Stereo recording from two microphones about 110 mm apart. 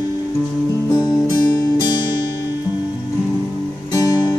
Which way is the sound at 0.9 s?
35° left (ahead or behind).